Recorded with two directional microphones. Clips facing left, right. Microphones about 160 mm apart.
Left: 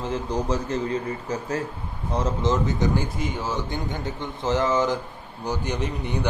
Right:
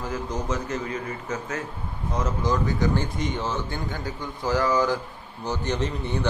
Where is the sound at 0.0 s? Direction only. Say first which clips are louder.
Left 3 dB; 30° left (ahead or behind); by 3.8 s 10° left (ahead or behind).